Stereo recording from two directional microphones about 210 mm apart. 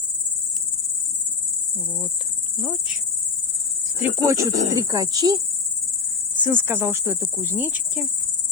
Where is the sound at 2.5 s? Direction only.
5° right (ahead or behind).